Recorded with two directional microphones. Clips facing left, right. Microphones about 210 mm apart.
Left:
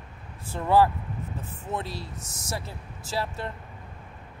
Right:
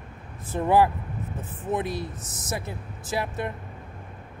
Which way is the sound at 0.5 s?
20° right (ahead or behind).